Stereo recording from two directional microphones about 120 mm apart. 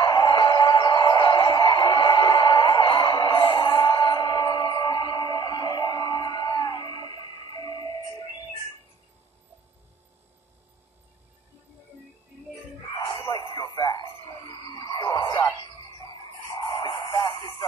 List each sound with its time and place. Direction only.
0.0 s music: 40° left (ahead or behind)
13.3 s music: 35° left (ahead or behind)
14.9 s radio: 30° left (ahead or behind)
16.8 s a sound: 35° left (ahead or behind)